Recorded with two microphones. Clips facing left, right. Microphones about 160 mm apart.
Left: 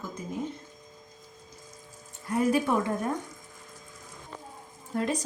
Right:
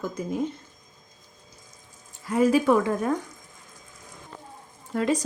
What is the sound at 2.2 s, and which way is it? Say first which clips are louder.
Speech: right 5 dB; 90° right.